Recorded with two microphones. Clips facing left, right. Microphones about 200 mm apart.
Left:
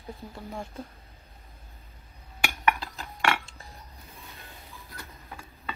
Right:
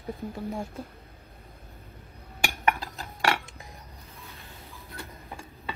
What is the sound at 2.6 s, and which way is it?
Cutlery, 30° right (ahead or behind).